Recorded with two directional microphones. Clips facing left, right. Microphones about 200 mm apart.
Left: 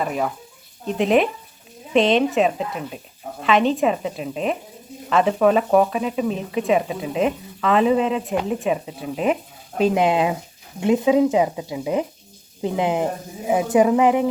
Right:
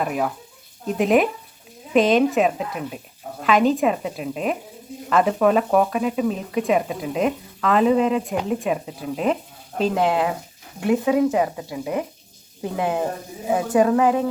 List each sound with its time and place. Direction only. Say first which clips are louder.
0.0 s speech: even; 5° right (ahead or behind); by 14.3 s 15° left (ahead or behind)